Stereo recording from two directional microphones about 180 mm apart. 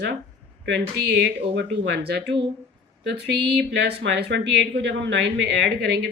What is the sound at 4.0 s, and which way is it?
Speech, 75° right (ahead or behind).